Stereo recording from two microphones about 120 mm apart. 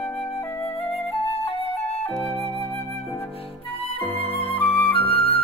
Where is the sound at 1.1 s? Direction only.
50° left (ahead or behind).